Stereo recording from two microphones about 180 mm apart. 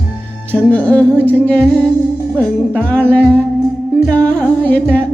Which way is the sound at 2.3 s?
10° left (ahead or behind).